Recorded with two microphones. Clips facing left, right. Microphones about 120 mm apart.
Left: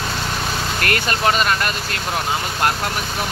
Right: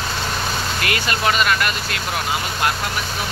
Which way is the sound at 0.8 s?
40° left (ahead or behind).